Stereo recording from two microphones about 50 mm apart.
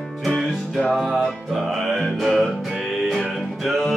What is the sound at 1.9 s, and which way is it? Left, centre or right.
Music, centre.